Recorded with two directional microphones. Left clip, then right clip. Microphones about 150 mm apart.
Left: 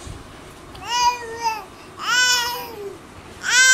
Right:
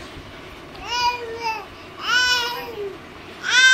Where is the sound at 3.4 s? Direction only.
5° left (ahead or behind).